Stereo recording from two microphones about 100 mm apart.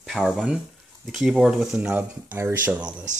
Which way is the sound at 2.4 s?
25° right (ahead or behind).